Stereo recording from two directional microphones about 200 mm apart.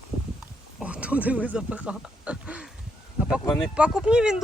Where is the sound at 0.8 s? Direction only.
5° right (ahead or behind).